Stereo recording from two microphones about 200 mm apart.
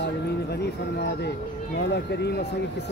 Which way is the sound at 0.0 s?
55° left (ahead or behind).